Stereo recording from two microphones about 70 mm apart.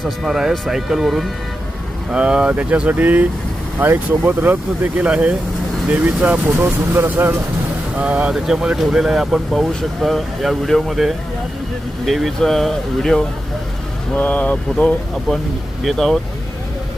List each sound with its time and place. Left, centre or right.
0.3 s speech: centre
2.0 s speech: centre
6.6 s speech: right
7.9 s speech: centre
8.3 s speech: centre
14.2 s speech: left
15.3 s speech: centre